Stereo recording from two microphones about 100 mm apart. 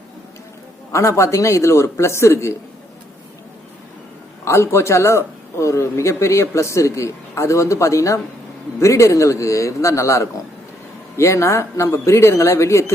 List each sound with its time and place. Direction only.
0.9 s speech: 30° left (ahead or behind)
4.4 s a man's voice: 25° left (ahead or behind)